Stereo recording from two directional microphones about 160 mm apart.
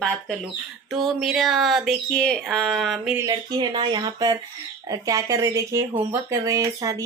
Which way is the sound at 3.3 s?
25° right (ahead or behind).